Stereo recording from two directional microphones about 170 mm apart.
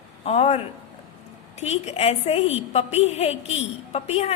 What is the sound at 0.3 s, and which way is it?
A woman's voice, 35° left (ahead or behind).